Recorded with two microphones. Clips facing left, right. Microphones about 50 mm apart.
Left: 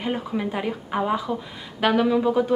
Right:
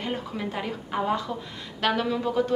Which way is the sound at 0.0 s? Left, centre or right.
Centre.